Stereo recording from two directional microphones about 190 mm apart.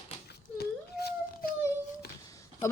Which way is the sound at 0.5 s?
55° left (ahead or behind).